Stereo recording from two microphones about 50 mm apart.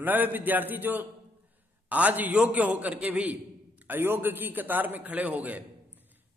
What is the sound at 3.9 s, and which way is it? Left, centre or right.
A man's voice, right.